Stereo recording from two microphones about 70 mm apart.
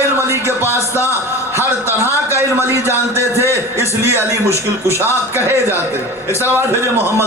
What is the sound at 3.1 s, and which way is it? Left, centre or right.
Speech, left.